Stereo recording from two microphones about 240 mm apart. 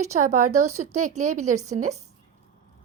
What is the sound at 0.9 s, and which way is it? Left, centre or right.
Speech, right.